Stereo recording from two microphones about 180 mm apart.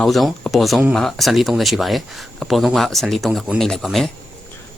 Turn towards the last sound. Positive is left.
turn(degrees=0)  # may be behind; listen again after turning